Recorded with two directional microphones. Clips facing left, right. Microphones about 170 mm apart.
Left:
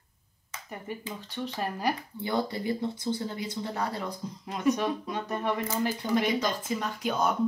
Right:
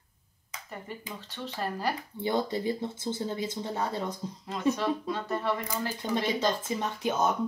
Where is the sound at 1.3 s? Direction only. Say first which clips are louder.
Left 1 dB; 15° left (ahead or behind).